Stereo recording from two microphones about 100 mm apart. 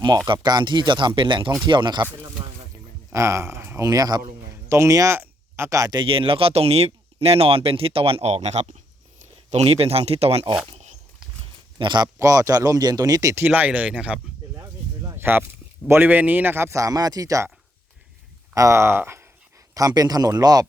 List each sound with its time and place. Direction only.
0.3 s speech: 45° right (ahead or behind)
3.1 s speech: 30° right (ahead or behind)
3.8 s speech: 40° right (ahead or behind)
4.5 s a man's voice: 30° right (ahead or behind)
6.1 s speech: 65° right (ahead or behind); by 10.4 s 90° right
11.8 s speech: 50° right (ahead or behind)
12.2 s speech: 35° right (ahead or behind)
13.3 s speech: 20° right (ahead or behind)
15.1 s a sound: 20° right (ahead or behind)
15.9 s a man's voice: 20° right (ahead or behind)
18.5 s speech: 30° right (ahead or behind)
19.7 s speech: 40° right (ahead or behind)